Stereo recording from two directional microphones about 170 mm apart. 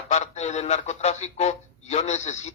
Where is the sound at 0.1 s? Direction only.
40° left (ahead or behind).